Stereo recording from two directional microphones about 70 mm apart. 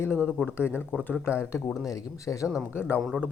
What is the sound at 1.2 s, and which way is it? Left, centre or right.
Speech, left.